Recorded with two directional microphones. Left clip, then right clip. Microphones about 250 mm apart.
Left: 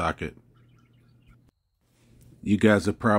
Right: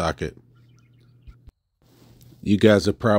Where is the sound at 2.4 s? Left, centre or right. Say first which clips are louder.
Right 5 dB; right.